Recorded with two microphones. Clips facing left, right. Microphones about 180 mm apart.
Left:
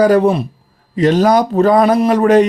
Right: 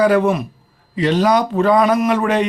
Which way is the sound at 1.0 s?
45° left (ahead or behind).